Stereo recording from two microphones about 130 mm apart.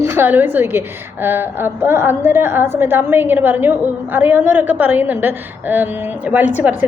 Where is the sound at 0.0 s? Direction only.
15° right (ahead or behind).